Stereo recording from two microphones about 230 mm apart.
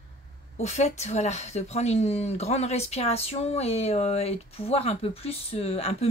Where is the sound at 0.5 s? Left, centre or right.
Left.